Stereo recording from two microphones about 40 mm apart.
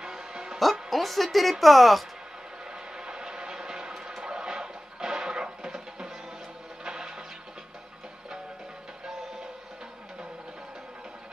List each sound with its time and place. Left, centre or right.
0.0 s music: centre
0.6 s speech: centre
3.1 s train: right
4.2 s music: centre